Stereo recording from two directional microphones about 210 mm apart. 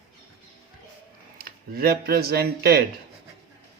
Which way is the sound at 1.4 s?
45° right (ahead or behind).